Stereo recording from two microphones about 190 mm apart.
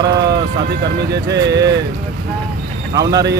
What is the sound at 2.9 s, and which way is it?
Speech, 20° right (ahead or behind).